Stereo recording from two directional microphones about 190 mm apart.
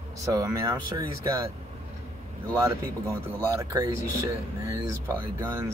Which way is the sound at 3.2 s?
15° right (ahead or behind).